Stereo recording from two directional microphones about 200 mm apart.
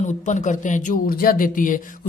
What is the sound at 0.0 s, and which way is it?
Speech, 35° left (ahead or behind).